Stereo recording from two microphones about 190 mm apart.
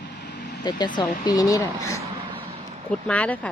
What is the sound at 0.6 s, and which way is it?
Speech, 20° left (ahead or behind).